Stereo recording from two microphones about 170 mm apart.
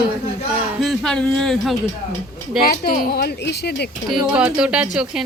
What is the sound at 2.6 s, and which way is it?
Speech, 55° left (ahead or behind).